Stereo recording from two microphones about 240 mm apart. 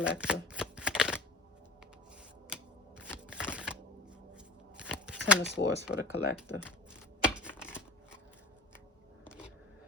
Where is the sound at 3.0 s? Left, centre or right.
Centre.